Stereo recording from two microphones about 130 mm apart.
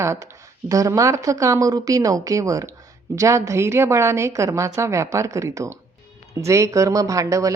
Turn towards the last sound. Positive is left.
turn(degrees=-25)  # may be behind; listen again after turning